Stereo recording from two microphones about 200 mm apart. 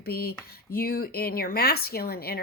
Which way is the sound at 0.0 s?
50° left (ahead or behind).